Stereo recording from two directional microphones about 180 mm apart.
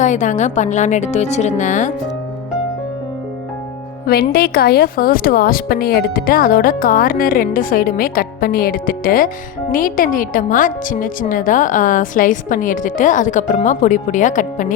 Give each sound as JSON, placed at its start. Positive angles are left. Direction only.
{"t": 0.0, "sound": "a woman's voice", "side_deg": 45}
{"t": 4.0, "sound": "speech", "side_deg": 60}